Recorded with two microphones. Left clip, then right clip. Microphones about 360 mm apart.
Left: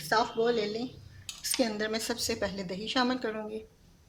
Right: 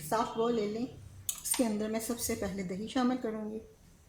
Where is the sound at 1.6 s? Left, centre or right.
Left.